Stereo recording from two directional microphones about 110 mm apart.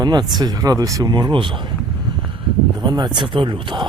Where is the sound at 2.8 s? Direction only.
40° right (ahead or behind).